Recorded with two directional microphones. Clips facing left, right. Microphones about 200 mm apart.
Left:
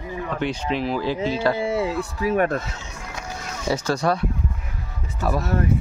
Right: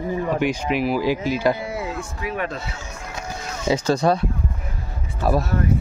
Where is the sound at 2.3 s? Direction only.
50° left (ahead or behind).